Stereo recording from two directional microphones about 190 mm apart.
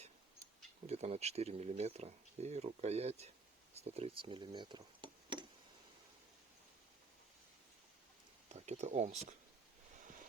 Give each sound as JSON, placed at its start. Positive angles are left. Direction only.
{"t": 0.9, "sound": "speech", "side_deg": -35}
{"t": 8.4, "sound": "speech", "side_deg": -35}